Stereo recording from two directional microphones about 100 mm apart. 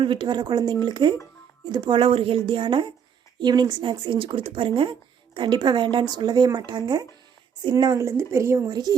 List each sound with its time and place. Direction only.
0.0 s speech: 55° right (ahead or behind); by 8.7 s 30° right (ahead or behind)
8.7 s speech: 40° right (ahead or behind)